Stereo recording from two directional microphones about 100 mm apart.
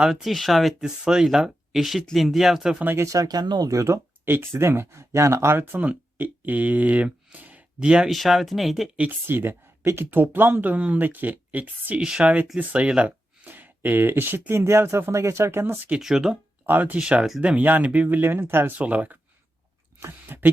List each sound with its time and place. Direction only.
0.0 s speech: centre (ahead or behind)
2.8 s speech: 25° right (ahead or behind); by 3.7 s 45° right (ahead or behind)
3.7 s speech: 30° right (ahead or behind); by 8.9 s centre (ahead or behind)
9.0 s speech: 20° right (ahead or behind)
15.9 s speech: 5° right (ahead or behind)
16.6 s speech: 20° right (ahead or behind)